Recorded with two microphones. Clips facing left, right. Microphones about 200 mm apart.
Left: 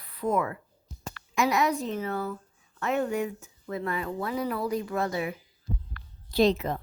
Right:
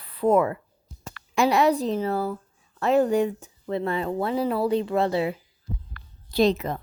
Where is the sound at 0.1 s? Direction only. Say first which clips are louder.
Right 7 dB; 30° right (ahead or behind).